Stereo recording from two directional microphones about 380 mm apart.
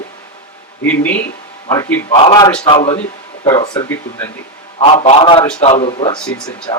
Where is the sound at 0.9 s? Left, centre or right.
Centre.